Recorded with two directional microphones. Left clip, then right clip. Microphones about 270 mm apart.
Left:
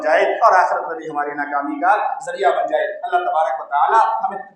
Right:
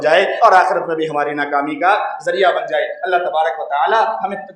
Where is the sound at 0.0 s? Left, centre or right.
Right.